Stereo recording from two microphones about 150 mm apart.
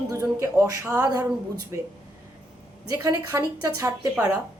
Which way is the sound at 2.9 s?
20° right (ahead or behind).